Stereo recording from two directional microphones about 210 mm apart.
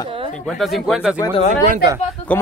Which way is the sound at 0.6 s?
Centre (ahead or behind).